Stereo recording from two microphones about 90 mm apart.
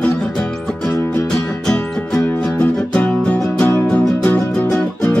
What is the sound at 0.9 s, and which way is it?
Music, 25° left (ahead or behind).